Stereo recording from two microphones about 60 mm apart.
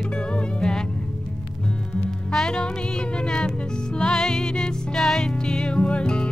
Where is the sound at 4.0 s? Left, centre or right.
Centre.